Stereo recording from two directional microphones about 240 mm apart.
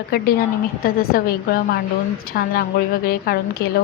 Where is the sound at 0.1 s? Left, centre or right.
Left.